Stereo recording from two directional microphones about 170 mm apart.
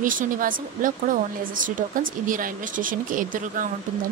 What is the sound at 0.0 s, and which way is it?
Speech, 50° right (ahead or behind).